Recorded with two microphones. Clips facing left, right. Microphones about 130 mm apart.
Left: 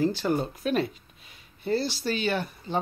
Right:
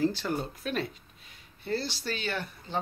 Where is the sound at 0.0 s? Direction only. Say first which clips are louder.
Left 4 dB; 5° left (ahead or behind).